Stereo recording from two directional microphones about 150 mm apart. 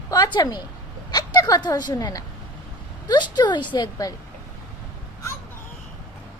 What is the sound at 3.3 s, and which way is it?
Speech, 30° left (ahead or behind).